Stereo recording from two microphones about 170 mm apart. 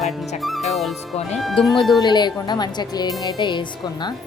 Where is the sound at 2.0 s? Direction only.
25° left (ahead or behind).